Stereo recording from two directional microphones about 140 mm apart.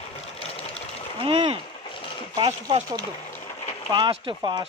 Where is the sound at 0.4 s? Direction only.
45° left (ahead or behind).